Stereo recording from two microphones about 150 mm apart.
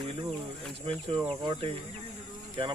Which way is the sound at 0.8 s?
30° right (ahead or behind).